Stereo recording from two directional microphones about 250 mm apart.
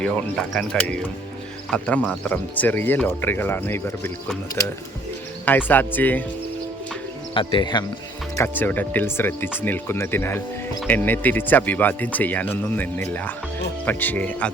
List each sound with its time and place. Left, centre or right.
0.0 s speech: centre
7.3 s speech: centre